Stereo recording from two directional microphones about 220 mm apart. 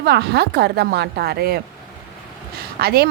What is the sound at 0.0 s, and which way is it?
A woman's voice, 50° right (ahead or behind).